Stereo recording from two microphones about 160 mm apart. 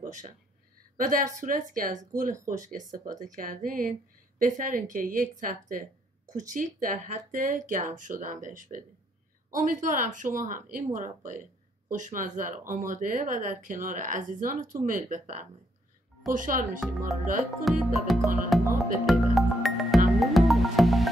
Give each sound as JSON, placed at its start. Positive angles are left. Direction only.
{"t": 0.0, "sound": "a sound", "side_deg": -55}
{"t": 0.9, "sound": "speech", "side_deg": -55}
{"t": 17.6, "sound": "music", "side_deg": 0}